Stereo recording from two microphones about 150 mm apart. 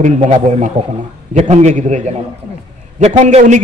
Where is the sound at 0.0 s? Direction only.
55° right (ahead or behind).